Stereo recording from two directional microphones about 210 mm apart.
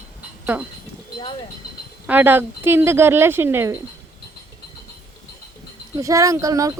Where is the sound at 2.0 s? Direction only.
10° right (ahead or behind).